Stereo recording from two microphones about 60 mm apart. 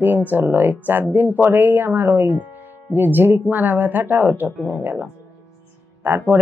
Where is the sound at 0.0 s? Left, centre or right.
Right.